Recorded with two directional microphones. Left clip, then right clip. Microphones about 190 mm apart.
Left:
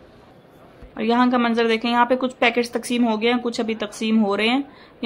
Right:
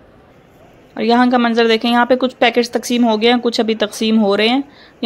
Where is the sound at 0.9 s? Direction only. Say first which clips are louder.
Right 6 dB; 20° right (ahead or behind).